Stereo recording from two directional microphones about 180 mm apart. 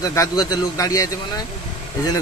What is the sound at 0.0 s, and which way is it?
A man's voice, 20° left (ahead or behind).